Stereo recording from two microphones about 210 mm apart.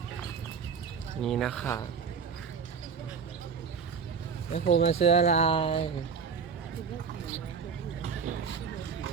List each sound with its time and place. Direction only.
1.2 s speech: centre (ahead or behind)
1.6 s a man's voice: 15° left (ahead or behind)
4.6 s speech: 50° left (ahead or behind)
4.9 s speech: 30° left (ahead or behind)
8.0 s a sound: 35° right (ahead or behind)